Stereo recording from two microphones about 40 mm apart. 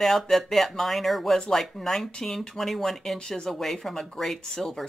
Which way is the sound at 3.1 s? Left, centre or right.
Centre.